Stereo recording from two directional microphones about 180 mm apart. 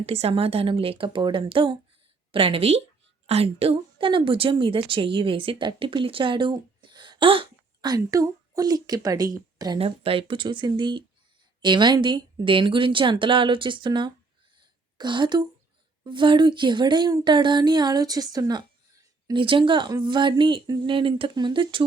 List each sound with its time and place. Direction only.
0.0 s a woman's voice: 35° right (ahead or behind)
14.6 s a sound: 25° right (ahead or behind)
16.0 s speech: 25° right (ahead or behind)